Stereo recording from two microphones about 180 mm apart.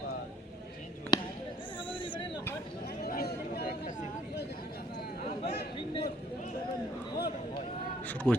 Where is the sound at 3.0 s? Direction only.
60° left (ahead or behind).